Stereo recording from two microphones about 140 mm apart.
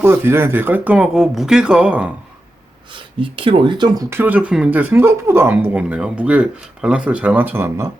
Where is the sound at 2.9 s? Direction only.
40° right (ahead or behind).